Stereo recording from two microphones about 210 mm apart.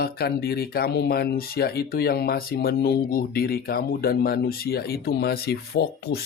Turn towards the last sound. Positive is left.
turn(degrees=50)  # may be behind; listen again after turning